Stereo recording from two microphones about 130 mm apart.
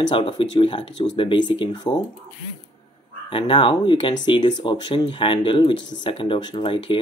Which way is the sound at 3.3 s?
40° left (ahead or behind).